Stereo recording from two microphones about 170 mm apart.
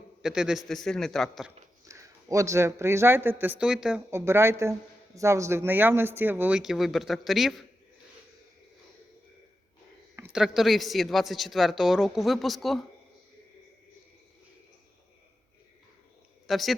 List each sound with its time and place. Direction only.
0.2 s a man's voice: 5° right (ahead or behind)
1.8 s speech: 20° right (ahead or behind)
4.1 s speech: 15° right (ahead or behind)
10.3 s speech: centre (ahead or behind)
16.5 s a woman's voice: centre (ahead or behind)